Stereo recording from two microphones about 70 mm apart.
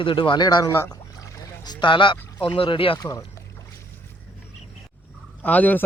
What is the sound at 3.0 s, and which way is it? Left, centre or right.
Speech, left.